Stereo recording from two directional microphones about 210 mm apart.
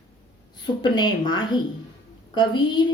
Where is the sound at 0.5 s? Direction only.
20° left (ahead or behind).